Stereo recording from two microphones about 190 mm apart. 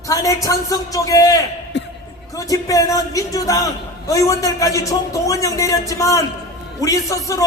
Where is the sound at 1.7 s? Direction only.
65° left (ahead or behind).